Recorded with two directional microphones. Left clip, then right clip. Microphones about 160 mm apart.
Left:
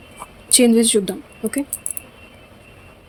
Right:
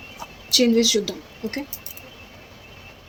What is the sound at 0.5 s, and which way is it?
Speech, 90° left.